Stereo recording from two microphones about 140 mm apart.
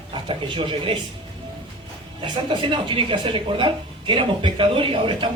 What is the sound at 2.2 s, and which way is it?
Speech, 35° right (ahead or behind).